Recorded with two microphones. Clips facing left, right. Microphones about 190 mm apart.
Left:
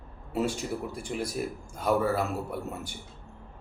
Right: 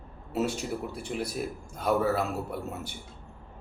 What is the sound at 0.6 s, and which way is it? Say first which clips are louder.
Speech: even; 5° right (ahead or behind).